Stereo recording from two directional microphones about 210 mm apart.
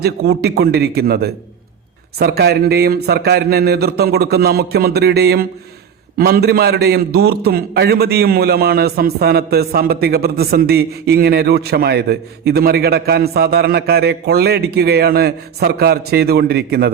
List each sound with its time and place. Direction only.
0.0 s a man's voice: 50° right (ahead or behind)